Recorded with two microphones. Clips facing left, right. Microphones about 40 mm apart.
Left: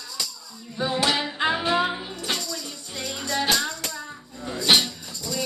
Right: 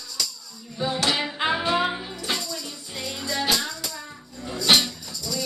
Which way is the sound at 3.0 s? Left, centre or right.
Left.